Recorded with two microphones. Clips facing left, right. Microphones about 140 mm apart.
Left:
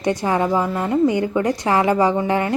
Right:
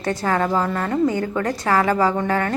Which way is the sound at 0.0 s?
15° left (ahead or behind).